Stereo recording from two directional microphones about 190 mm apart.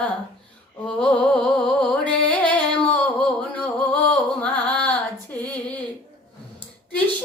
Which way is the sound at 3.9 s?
5° left (ahead or behind).